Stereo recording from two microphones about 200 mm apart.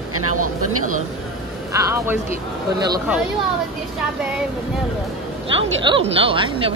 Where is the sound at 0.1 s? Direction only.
90° right.